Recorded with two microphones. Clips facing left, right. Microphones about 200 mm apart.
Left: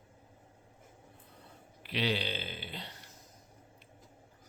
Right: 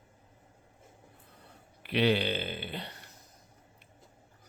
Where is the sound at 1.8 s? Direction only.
60° right (ahead or behind).